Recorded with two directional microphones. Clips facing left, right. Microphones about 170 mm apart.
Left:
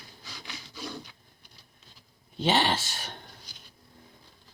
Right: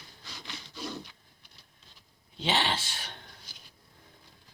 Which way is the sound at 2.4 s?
45° left (ahead or behind).